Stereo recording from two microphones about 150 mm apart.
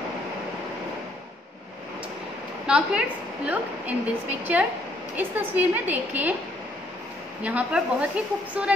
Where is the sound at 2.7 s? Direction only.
5° right (ahead or behind).